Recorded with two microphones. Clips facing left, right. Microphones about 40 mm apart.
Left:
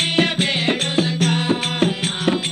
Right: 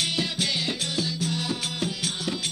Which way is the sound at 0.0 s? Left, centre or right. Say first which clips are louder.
Left 9 dB; left.